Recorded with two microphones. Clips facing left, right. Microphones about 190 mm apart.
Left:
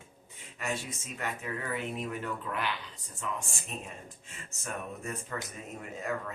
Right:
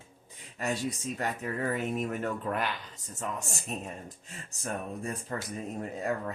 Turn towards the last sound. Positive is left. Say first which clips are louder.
# right 5 dB
turn(degrees=-35)  # may be behind; listen again after turning